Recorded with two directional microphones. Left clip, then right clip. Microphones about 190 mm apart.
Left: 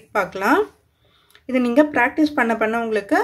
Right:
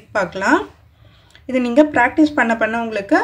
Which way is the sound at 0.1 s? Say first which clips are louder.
Right 2 dB; 30° left (ahead or behind).